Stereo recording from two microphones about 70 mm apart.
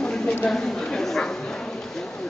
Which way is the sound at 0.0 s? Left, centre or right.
Centre.